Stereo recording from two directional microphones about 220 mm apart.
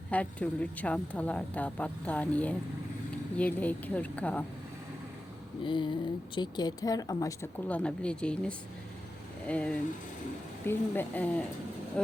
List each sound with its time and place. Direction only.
0.1 s speech: 5° left (ahead or behind)
5.6 s speech: 20° left (ahead or behind); by 12.1 s 5° left (ahead or behind)